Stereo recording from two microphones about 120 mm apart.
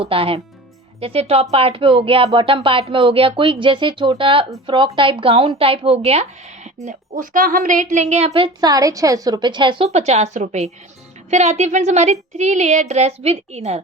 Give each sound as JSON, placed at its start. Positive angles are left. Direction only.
{"t": 0.0, "sound": "speech", "side_deg": -50}
{"t": 6.8, "sound": "a woman's voice", "side_deg": -90}
{"t": 8.6, "sound": "a woman's voice", "side_deg": -30}
{"t": 9.9, "sound": "a child's voice", "side_deg": -65}